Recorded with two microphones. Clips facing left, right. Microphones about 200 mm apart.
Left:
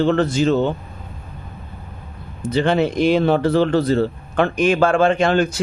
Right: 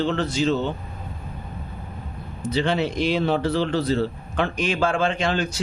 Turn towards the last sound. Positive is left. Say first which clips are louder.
# left 7 dB
turn(degrees=55)  # may be behind; listen again after turning